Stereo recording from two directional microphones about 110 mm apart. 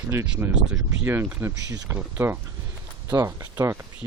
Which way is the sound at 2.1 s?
20° right (ahead or behind).